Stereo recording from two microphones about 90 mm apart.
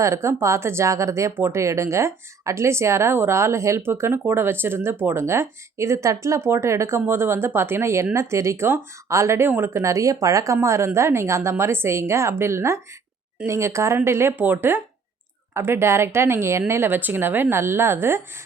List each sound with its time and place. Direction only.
0.0 s a woman's voice: 30° right (ahead or behind)